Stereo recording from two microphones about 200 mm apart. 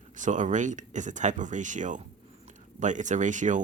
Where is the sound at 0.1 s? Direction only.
40° right (ahead or behind).